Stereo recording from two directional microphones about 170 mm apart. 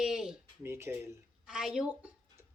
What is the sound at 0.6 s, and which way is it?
Speech, 15° right (ahead or behind).